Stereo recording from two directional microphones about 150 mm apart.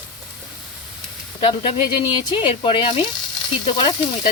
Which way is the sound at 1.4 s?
40° left (ahead or behind).